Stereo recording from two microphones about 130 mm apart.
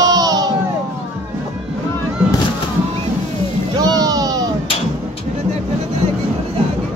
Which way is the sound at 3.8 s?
30° right (ahead or behind).